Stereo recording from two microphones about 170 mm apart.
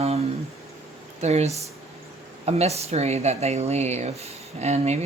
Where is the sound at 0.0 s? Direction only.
40° right (ahead or behind).